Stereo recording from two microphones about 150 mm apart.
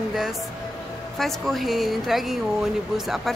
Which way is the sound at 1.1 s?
Centre (ahead or behind).